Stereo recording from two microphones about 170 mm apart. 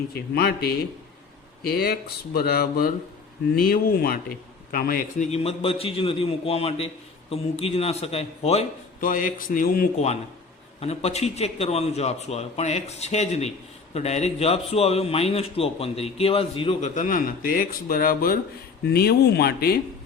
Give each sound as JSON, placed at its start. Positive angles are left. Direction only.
{"t": 0.3, "sound": "a man's voice", "side_deg": 70}
{"t": 5.3, "sound": "a man's voice", "side_deg": 35}
{"t": 9.0, "sound": "a man's voice", "side_deg": 55}
{"t": 10.8, "sound": "a man's voice", "side_deg": 40}
{"t": 18.9, "sound": "speech", "side_deg": 70}